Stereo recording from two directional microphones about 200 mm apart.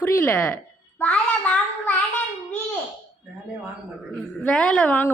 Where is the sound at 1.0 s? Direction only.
5° left (ahead or behind).